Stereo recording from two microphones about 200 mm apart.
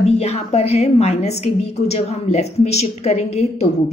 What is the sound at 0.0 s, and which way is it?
A woman's voice, 35° left (ahead or behind).